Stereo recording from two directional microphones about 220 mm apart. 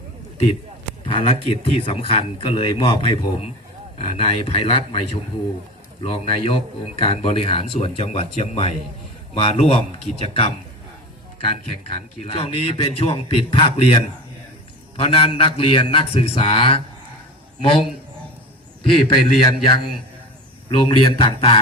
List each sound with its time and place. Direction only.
1.0 s a man's voice: 25° left (ahead or behind)
20.7 s speech: 25° left (ahead or behind)